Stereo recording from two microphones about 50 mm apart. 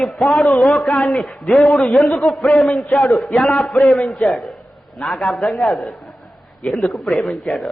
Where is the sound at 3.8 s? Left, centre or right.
Left.